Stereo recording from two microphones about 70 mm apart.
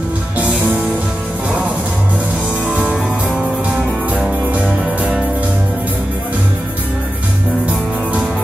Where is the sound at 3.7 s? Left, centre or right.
Right.